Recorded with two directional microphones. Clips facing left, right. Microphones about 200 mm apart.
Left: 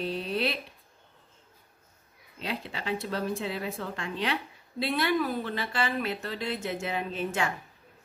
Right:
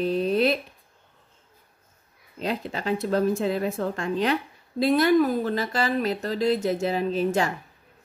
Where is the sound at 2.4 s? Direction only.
45° right (ahead or behind).